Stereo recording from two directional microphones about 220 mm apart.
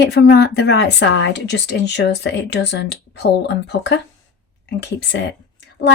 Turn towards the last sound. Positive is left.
turn(degrees=50)  # may be behind; listen again after turning